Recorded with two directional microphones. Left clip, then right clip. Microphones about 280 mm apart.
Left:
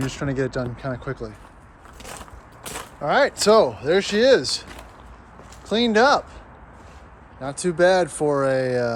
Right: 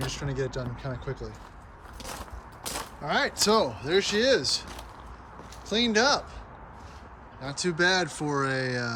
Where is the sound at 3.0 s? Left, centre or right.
Centre.